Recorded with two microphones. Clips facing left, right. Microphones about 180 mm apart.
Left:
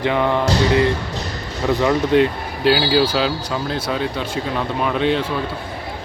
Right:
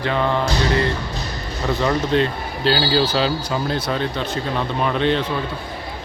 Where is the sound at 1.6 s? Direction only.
10° left (ahead or behind).